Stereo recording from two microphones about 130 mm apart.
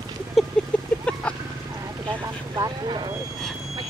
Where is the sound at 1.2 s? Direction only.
10° left (ahead or behind).